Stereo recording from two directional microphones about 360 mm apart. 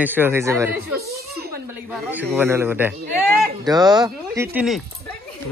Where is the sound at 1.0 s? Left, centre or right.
Centre.